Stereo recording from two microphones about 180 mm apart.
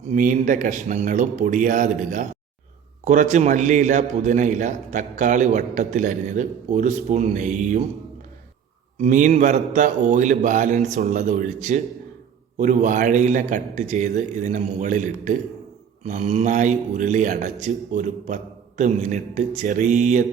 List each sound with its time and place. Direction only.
0.1 s a man's voice: 45° right (ahead or behind)
9.0 s a man's voice: 45° right (ahead or behind)